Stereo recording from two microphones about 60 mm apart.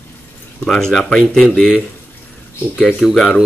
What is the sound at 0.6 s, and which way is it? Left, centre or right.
Speech, centre.